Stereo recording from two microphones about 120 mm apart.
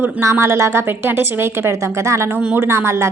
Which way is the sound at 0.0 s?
20° right (ahead or behind).